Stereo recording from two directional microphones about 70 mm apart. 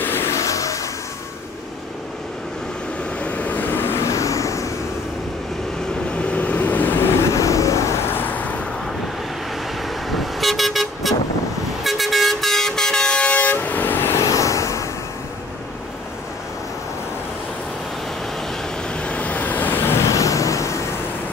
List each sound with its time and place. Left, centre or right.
0.0 s vehicle: left
0.4 s vehicle: left
3.2 s vehicle: left
4.0 s vehicle: left
6.1 s vehicle: centre
7.2 s vehicle: left
8.1 s vehicle: left
10.0 s vehicle: centre; by 14.1 s left
14.1 s vehicle: left
18.9 s vehicle: centre
20.0 s vehicle: left